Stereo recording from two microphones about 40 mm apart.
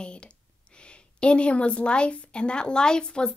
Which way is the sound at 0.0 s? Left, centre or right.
Left.